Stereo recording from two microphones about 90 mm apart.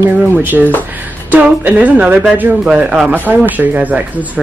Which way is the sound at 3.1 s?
20° right (ahead or behind).